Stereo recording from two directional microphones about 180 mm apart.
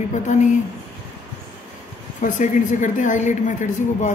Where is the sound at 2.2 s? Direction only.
45° left (ahead or behind).